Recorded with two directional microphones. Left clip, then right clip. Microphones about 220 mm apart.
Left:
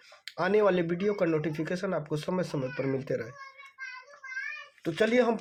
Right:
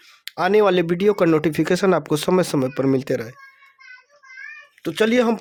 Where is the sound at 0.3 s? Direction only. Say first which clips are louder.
Right 8 dB; 40° right (ahead or behind).